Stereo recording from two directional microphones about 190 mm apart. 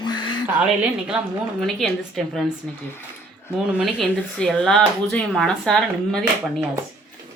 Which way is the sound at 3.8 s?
Centre (ahead or behind).